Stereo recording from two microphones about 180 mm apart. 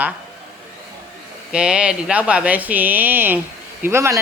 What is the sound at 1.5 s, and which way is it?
Speech, 5° right (ahead or behind).